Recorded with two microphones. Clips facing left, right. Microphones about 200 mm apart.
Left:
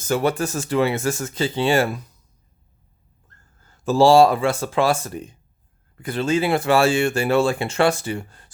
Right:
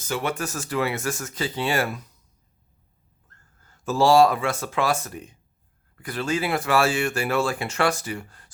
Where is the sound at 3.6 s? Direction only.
30° left (ahead or behind).